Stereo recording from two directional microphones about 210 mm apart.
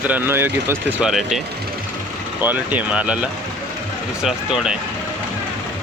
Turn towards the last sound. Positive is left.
turn(degrees=-5)  # may be behind; listen again after turning